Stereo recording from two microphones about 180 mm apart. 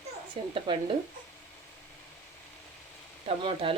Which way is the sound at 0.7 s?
25° right (ahead or behind).